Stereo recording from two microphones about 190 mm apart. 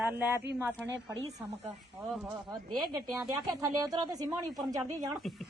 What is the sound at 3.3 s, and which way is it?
Speech, 20° right (ahead or behind).